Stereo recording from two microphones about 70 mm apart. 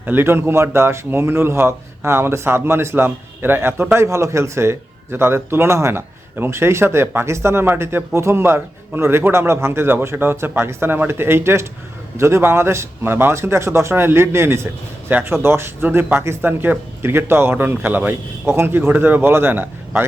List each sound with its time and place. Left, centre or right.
0.0 s a man's voice: right